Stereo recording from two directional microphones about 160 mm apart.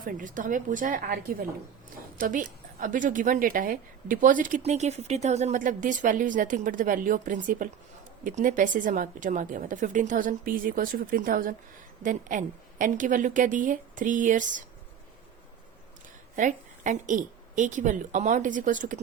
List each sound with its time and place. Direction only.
0.0 s a woman's voice: 55° right (ahead or behind)
16.3 s a woman's voice: 50° right (ahead or behind)